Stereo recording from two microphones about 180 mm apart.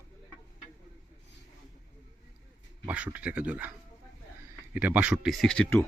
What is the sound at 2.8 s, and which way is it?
Speech, 10° right (ahead or behind).